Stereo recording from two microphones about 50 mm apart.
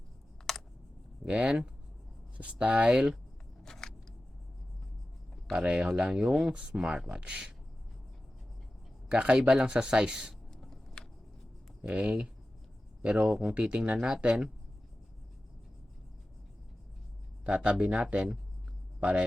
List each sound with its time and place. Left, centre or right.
0.5 s computer keyboard: centre
1.2 s speech: right
3.6 s a sound: centre
5.5 s speech: centre
9.0 s speech: right
10.5 s a sound: centre
11.8 s speech: right
17.4 s speech: right